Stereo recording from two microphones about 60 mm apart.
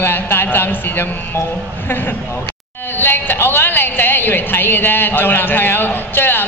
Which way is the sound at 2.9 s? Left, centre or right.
Left.